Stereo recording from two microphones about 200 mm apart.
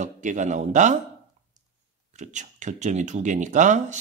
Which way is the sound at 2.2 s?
40° right (ahead or behind).